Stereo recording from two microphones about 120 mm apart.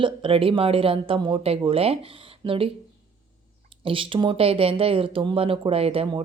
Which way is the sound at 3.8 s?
45° right (ahead or behind).